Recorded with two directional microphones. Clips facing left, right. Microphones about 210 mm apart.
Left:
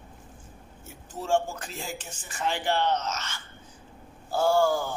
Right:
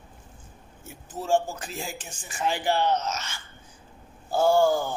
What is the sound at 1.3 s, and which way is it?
Speech, 5° right (ahead or behind).